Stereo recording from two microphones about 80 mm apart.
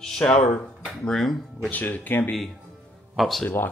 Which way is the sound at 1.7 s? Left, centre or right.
Left.